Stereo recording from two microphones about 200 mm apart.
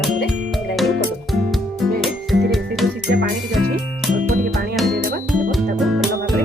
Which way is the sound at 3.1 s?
50° right (ahead or behind).